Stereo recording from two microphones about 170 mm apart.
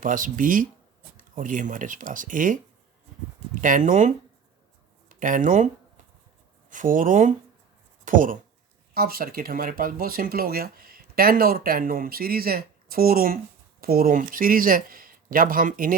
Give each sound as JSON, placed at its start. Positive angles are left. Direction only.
{"t": 0.0, "sound": "speech", "side_deg": -50}
{"t": 3.6, "sound": "speech", "side_deg": -50}
{"t": 6.7, "sound": "speech", "side_deg": -50}